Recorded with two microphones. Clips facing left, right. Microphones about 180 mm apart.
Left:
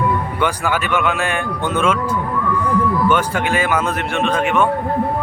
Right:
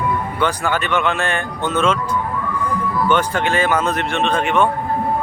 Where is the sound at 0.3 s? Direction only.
10° left (ahead or behind).